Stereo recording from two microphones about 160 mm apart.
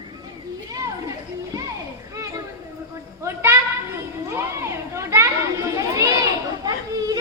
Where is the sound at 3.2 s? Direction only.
15° right (ahead or behind).